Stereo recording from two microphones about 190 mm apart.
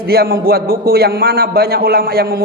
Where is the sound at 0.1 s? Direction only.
55° right (ahead or behind).